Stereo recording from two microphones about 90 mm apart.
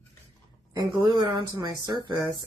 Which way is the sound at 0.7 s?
55° right (ahead or behind).